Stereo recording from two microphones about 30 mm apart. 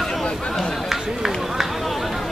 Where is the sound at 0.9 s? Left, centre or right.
Centre.